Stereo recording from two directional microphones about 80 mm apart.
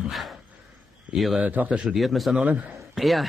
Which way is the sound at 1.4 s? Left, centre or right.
Centre.